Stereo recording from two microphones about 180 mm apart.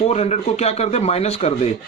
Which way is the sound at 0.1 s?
40° left (ahead or behind).